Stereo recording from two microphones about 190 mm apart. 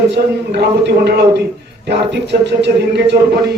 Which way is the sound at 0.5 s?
65° right (ahead or behind).